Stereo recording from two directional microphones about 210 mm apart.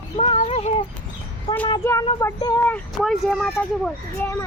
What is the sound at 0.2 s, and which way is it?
Cat, 25° left (ahead or behind).